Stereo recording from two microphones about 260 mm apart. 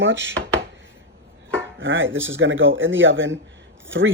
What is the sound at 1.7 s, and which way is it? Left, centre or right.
Speech, right.